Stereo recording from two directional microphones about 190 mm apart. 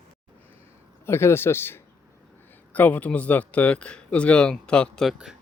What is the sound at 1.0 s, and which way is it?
Speech, 15° left (ahead or behind).